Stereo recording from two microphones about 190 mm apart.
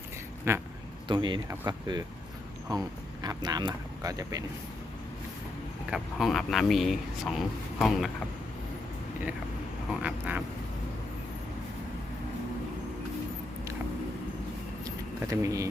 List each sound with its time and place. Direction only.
0.5 s vehicle: 15° right (ahead or behind)
1.0 s speech: 25° right (ahead or behind)
5.9 s speech: centre (ahead or behind)
9.9 s vehicle: 5° right (ahead or behind)
14.8 s vehicle: 15° right (ahead or behind)